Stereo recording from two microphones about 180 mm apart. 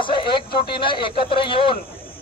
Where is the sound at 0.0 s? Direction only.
25° left (ahead or behind).